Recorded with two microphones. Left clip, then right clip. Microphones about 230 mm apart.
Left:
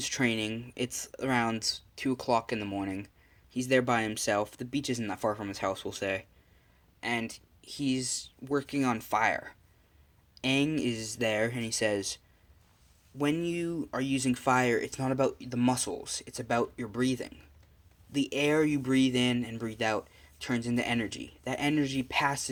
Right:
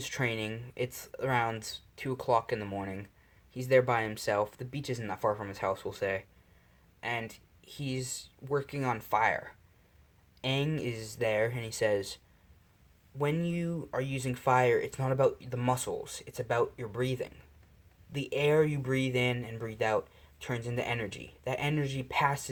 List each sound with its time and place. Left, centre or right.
0.0 s speech: left